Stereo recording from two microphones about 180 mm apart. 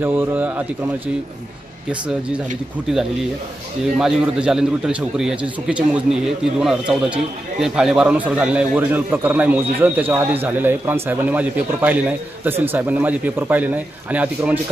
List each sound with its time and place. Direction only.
0.0 s a man's voice: 10° right (ahead or behind)